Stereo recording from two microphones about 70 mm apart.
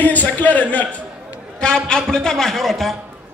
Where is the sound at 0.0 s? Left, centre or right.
Left.